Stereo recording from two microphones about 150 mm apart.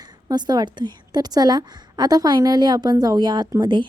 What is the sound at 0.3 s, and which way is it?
A woman's voice, 25° right (ahead or behind).